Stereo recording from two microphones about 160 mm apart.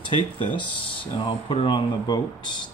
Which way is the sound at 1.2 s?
30° left (ahead or behind).